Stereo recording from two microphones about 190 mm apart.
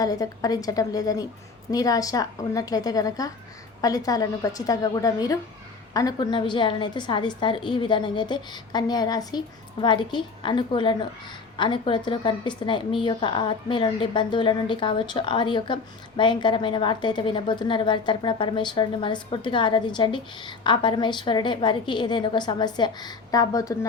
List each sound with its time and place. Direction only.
0.0 s a woman's voice: 20° left (ahead or behind)